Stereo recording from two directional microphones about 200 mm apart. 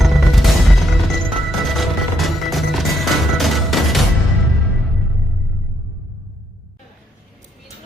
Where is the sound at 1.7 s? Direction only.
Centre (ahead or behind).